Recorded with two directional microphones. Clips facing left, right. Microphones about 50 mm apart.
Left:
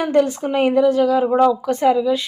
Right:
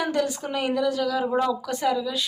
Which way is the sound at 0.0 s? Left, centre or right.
Left.